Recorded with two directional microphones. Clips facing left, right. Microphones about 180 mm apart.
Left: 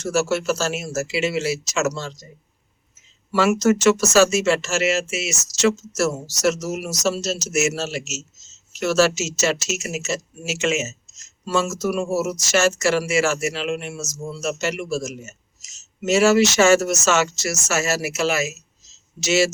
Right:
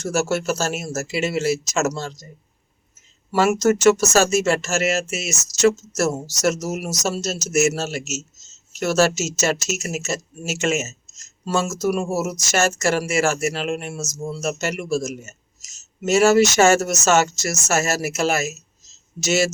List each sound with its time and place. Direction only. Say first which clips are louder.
0.0 s speech: left 1 dB; 45° right (ahead or behind)
3.3 s speech: even; 45° right (ahead or behind)